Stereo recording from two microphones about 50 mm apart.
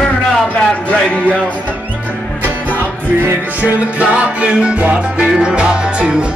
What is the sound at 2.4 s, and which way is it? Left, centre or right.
Music, right.